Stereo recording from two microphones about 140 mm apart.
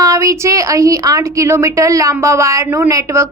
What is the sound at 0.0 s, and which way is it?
A woman's voice, 20° right (ahead or behind).